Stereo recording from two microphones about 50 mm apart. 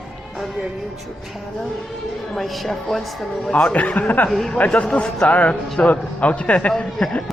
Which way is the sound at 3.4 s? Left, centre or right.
Centre.